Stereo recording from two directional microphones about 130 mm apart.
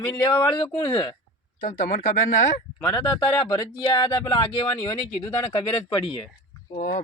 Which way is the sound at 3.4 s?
30° left (ahead or behind).